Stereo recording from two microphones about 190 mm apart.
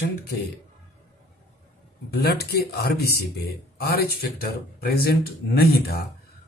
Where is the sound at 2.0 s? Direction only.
55° left (ahead or behind).